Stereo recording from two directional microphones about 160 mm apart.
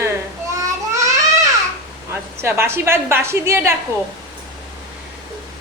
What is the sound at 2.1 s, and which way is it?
A woman's voice, 15° right (ahead or behind).